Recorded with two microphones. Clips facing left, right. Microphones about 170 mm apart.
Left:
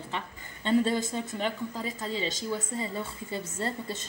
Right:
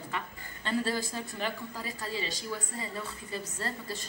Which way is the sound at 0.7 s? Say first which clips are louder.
Left 6 dB; 20° left (ahead or behind).